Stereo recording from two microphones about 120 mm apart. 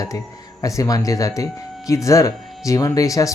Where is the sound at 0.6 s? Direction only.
30° left (ahead or behind).